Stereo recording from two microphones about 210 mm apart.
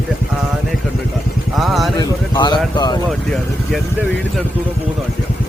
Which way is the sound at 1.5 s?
Centre (ahead or behind).